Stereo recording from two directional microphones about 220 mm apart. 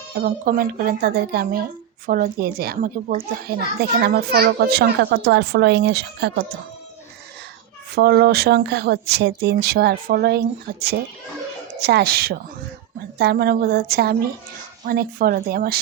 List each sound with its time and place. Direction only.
0.1 s a child's voice: 40° right (ahead or behind)
7.9 s a child's voice: 45° right (ahead or behind)